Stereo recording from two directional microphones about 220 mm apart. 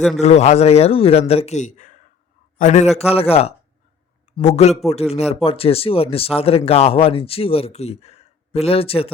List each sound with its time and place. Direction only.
0.2 s speech: 30° left (ahead or behind)